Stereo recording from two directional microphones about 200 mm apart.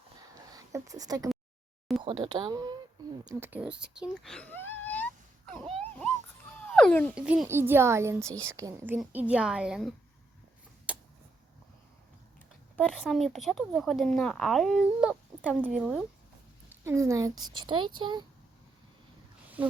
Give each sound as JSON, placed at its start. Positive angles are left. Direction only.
{"t": 0.3, "sound": "a sound", "side_deg": -15}
{"t": 2.0, "sound": "speech", "side_deg": -25}
{"t": 6.7, "sound": "speech", "side_deg": 5}
{"t": 7.2, "sound": "a child's voice", "side_deg": -5}
{"t": 10.9, "sound": "a sound", "side_deg": -5}
{"t": 12.9, "sound": "a child's voice", "side_deg": 0}